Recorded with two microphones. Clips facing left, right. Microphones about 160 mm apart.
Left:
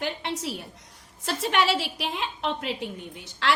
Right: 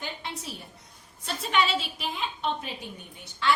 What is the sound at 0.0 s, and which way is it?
A woman's voice, 75° left (ahead or behind).